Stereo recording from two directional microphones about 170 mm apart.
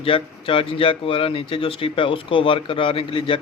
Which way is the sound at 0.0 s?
30° left (ahead or behind).